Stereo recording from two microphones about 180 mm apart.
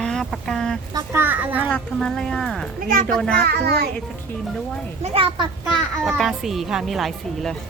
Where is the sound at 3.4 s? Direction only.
60° right (ahead or behind).